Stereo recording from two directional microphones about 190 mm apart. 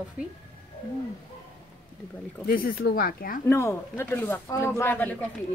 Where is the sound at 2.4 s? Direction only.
50° left (ahead or behind).